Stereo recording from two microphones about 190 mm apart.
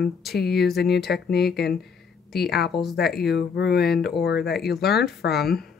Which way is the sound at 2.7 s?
Centre (ahead or behind).